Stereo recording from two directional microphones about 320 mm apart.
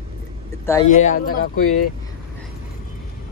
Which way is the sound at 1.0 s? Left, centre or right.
Left.